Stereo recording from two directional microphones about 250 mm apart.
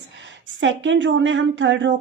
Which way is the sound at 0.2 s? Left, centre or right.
Right.